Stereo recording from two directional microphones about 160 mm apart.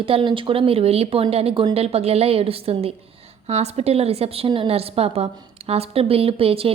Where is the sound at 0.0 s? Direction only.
35° right (ahead or behind).